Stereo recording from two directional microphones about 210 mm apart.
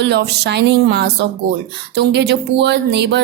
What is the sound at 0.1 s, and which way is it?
Speech, 55° right (ahead or behind).